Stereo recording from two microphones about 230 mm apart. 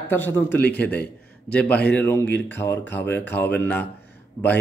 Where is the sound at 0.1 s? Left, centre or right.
Centre.